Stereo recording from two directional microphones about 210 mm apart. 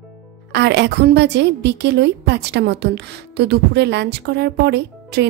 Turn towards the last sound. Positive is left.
turn(degrees=-55)  # may be behind; listen again after turning